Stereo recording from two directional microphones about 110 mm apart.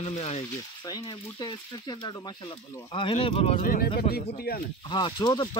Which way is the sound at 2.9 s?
60° left (ahead or behind).